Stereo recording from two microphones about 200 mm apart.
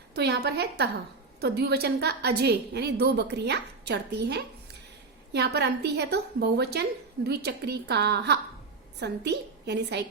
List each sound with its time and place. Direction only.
0.1 s a woman's voice: 55° right (ahead or behind)